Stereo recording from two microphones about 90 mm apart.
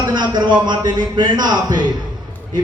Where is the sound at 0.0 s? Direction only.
55° right (ahead or behind).